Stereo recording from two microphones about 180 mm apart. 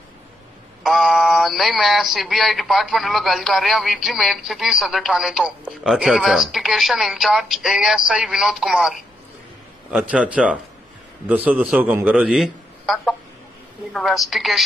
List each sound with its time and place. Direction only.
0.9 s a man's voice: centre (ahead or behind)